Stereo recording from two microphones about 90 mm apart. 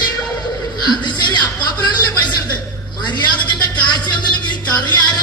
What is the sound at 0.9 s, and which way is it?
Music, 55° left (ahead or behind).